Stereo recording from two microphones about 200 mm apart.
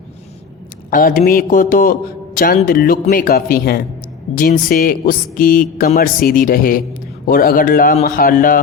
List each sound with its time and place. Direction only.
0.9 s a man's voice: 45° left (ahead or behind)